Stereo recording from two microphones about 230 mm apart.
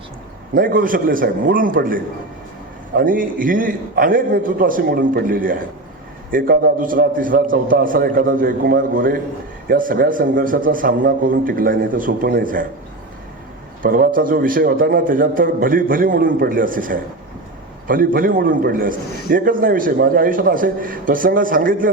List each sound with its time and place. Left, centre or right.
0.5 s a man's voice: right
13.8 s a man's voice: right